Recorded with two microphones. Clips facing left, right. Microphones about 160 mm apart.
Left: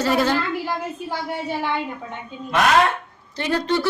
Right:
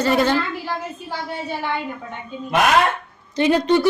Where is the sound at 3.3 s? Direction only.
20° right (ahead or behind).